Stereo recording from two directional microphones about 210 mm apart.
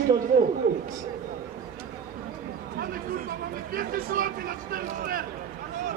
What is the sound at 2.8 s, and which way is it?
Chatter, 40° right (ahead or behind).